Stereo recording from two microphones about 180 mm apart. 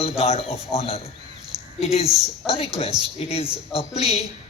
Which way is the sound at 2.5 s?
35° left (ahead or behind).